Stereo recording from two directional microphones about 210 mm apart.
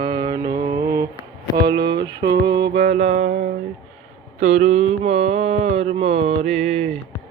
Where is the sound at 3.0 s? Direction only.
40° right (ahead or behind).